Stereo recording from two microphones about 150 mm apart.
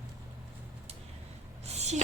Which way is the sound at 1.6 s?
45° right (ahead or behind).